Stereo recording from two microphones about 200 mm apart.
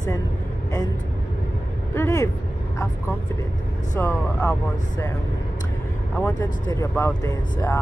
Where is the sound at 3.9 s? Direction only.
10° left (ahead or behind).